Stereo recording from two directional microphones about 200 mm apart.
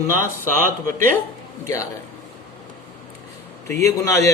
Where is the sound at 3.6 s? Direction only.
15° left (ahead or behind).